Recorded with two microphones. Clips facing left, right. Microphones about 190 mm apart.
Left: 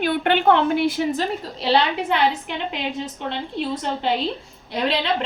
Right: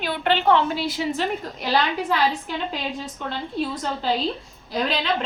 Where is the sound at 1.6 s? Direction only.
25° left (ahead or behind).